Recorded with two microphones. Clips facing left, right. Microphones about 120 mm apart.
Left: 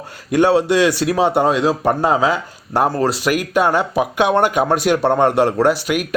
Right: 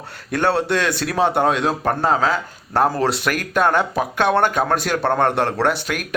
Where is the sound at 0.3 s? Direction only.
10° left (ahead or behind).